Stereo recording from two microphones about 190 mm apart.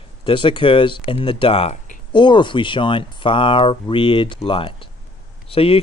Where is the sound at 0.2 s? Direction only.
25° left (ahead or behind).